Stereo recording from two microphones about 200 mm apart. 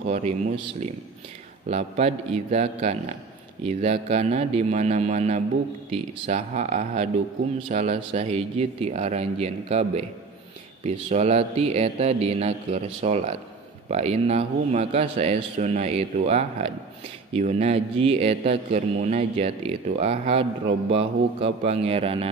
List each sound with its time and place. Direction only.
1.7 s a man's voice: 35° right (ahead or behind)